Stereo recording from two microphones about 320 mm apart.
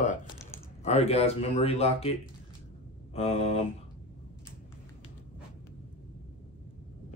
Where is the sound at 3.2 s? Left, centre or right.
Centre.